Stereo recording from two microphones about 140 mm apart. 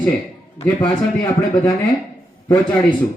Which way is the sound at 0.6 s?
25° left (ahead or behind).